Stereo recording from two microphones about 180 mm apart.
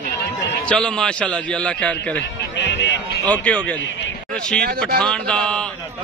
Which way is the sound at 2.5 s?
75° left (ahead or behind).